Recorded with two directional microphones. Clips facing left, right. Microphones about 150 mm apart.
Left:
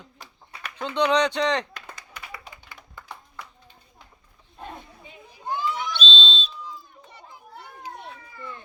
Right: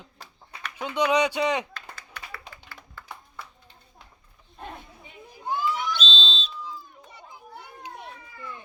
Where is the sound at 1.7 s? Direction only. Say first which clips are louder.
Even; 15° left (ahead or behind).